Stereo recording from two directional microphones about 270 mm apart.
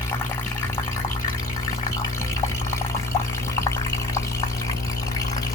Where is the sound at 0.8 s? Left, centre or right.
Centre.